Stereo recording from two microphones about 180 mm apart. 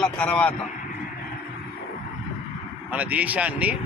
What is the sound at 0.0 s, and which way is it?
Speech, 5° left (ahead or behind).